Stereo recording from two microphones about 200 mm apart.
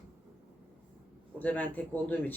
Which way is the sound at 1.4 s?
10° left (ahead or behind).